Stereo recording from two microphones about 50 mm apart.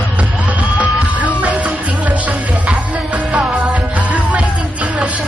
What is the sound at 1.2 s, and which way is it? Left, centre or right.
Music, right.